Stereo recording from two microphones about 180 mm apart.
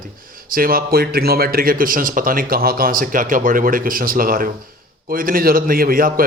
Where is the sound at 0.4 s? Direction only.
55° right (ahead or behind).